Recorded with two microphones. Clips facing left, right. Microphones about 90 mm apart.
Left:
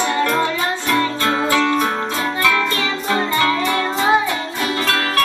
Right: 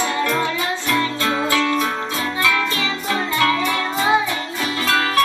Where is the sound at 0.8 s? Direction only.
25° left (ahead or behind).